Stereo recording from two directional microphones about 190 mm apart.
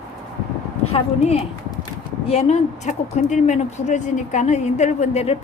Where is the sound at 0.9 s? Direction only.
30° left (ahead or behind).